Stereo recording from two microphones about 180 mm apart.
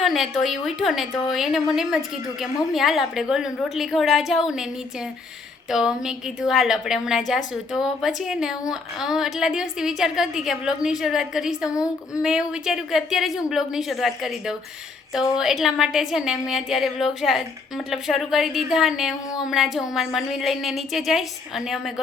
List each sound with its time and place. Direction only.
0.0 s a woman's voice: centre (ahead or behind)
5.7 s a woman's voice: 5° right (ahead or behind)